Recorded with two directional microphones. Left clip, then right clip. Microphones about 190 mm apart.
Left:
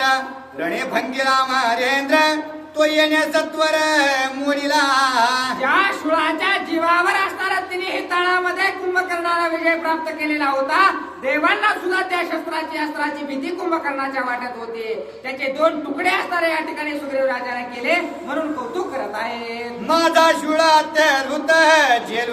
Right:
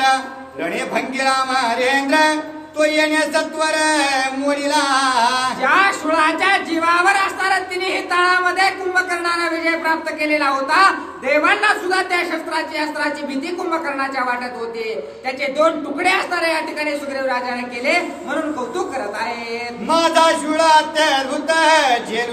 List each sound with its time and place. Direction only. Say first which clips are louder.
0.6 s music: even; 20° left (ahead or behind)
5.6 s speech: right 3 dB; 15° right (ahead or behind)
15.5 s speech: right 2 dB; 15° right (ahead or behind)
19.9 s music: right 1 dB; 20° left (ahead or behind)